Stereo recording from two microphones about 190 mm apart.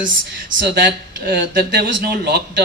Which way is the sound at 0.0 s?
50° right (ahead or behind).